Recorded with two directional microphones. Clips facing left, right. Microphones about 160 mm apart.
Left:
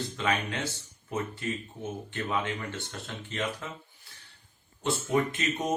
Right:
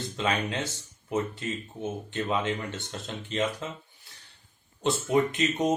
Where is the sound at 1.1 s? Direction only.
25° right (ahead or behind).